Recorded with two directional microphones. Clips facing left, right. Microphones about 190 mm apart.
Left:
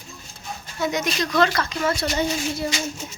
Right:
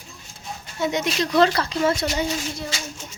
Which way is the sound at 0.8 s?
25° right (ahead or behind).